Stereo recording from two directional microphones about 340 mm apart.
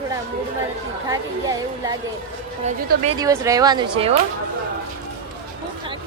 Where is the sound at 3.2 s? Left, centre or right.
Centre.